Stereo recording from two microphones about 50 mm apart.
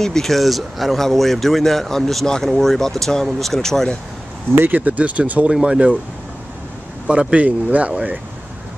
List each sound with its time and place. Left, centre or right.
0.0 s a man's voice: centre
4.6 s speech: right
5.5 s speech: centre
7.1 s speech: right